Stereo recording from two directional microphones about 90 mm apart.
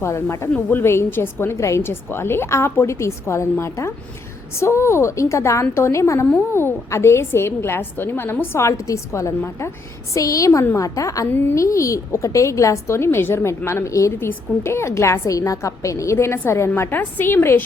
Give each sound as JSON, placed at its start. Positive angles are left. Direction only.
{"t": 0.0, "sound": "a woman's voice", "side_deg": 30}
{"t": 10.2, "sound": "a woman's voice", "side_deg": 40}
{"t": 11.3, "sound": "a woman's voice", "side_deg": 25}